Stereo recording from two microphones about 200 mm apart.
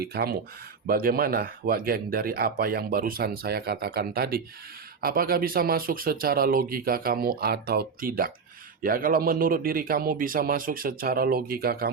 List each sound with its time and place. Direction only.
0.0 s speech: 50° right (ahead or behind)